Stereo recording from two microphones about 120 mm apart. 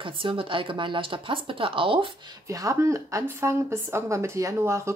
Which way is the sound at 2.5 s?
25° right (ahead or behind).